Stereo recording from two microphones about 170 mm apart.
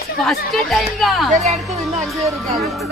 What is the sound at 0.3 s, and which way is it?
Speech, centre (ahead or behind).